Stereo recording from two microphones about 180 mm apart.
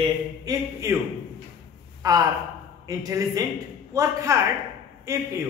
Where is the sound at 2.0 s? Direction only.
20° right (ahead or behind).